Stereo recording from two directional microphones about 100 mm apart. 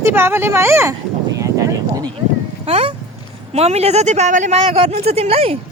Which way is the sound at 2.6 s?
80° right.